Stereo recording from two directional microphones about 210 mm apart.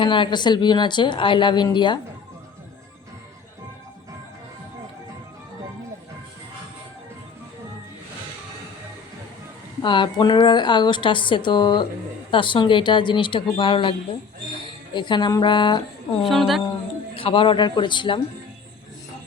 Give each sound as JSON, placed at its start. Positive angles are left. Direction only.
{"t": 0.0, "sound": "a woman's voice", "side_deg": 20}
{"t": 9.8, "sound": "a woman's voice", "side_deg": 20}
{"t": 14.9, "sound": "a woman's voice", "side_deg": 20}
{"t": 16.2, "sound": "a woman's voice", "side_deg": 0}
{"t": 17.2, "sound": "a woman's voice", "side_deg": 25}